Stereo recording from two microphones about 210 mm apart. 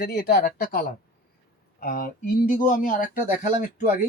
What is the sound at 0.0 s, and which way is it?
Speech, 50° left (ahead or behind).